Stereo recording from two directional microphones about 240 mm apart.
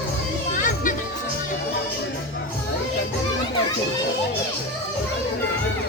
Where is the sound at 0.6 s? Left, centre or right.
Left.